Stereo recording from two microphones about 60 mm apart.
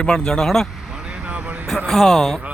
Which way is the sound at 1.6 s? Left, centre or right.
Centre.